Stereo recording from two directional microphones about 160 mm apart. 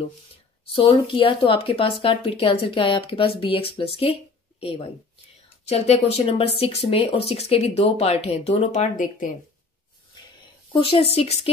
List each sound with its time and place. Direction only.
0.7 s speech: 35° left (ahead or behind); by 9.3 s 55° left (ahead or behind)
10.7 s speech: 35° left (ahead or behind)